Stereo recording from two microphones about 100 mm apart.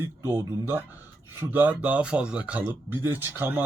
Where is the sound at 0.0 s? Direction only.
25° right (ahead or behind).